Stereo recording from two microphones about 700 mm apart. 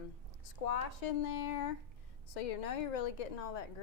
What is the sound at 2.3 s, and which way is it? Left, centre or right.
A woman's voice, left.